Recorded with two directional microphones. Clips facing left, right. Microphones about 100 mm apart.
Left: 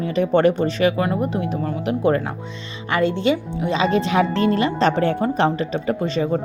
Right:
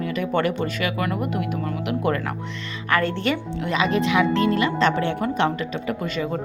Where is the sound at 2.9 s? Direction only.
20° left (ahead or behind).